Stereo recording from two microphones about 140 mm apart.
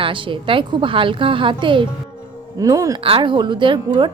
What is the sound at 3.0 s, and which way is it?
A woman's voice, 40° right (ahead or behind).